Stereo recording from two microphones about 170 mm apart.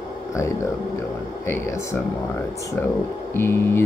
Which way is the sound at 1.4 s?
15° left (ahead or behind).